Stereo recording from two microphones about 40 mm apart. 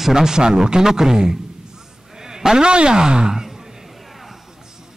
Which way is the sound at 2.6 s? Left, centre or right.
Right.